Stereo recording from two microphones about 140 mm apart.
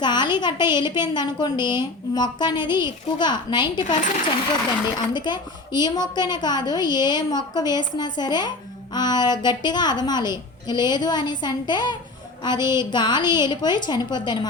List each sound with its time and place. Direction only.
0.0 s a woman's voice: 30° left (ahead or behind)
4.9 s a woman's voice: 30° left (ahead or behind)